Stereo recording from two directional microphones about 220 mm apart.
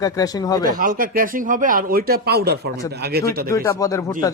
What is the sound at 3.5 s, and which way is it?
Speech, 15° left (ahead or behind).